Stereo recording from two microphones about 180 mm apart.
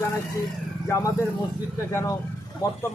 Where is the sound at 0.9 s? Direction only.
20° left (ahead or behind).